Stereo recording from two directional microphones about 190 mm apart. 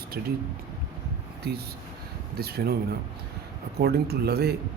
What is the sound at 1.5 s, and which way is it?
Speech, 55° right (ahead or behind).